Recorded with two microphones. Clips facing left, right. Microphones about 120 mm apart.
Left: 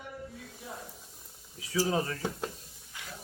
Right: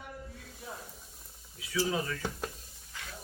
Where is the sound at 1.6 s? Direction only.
35° left (ahead or behind).